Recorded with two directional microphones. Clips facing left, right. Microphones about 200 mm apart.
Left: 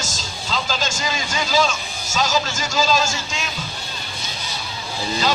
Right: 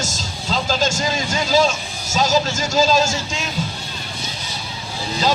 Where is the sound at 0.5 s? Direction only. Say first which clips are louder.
Right 5 dB; 40° right (ahead or behind).